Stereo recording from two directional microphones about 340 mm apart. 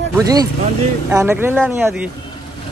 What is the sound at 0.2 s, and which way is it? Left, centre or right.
Speech, centre.